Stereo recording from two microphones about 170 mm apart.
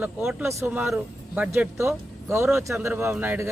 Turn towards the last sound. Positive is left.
turn(degrees=-10)  # may be behind; listen again after turning